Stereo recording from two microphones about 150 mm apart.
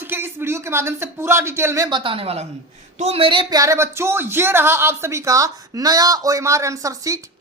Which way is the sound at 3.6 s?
20° right (ahead or behind).